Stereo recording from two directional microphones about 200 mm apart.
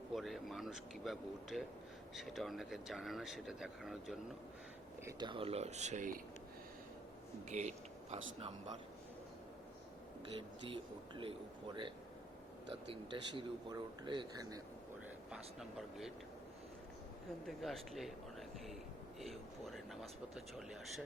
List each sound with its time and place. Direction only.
0.1 s speech: centre (ahead or behind)
5.0 s speech: 25° right (ahead or behind)
7.5 s speech: 35° right (ahead or behind)
10.7 s speech: 25° right (ahead or behind)
17.4 s speech: centre (ahead or behind)
19.2 s speech: centre (ahead or behind)